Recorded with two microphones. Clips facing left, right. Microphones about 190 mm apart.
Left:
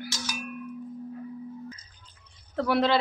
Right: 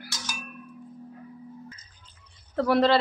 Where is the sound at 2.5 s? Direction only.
Centre (ahead or behind).